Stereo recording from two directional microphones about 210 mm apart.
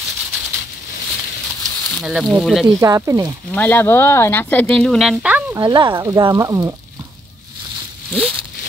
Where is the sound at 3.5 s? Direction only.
10° left (ahead or behind); by 6.7 s 15° right (ahead or behind).